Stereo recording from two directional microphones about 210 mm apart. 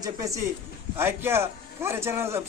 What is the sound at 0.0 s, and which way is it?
A man's voice, 15° right (ahead or behind).